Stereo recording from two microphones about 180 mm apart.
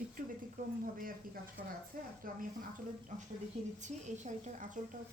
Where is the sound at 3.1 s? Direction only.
45° right (ahead or behind).